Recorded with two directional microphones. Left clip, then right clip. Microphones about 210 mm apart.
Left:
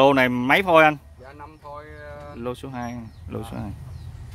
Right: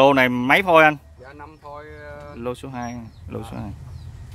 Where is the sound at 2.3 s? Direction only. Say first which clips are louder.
Right 2 dB; 5° right (ahead or behind).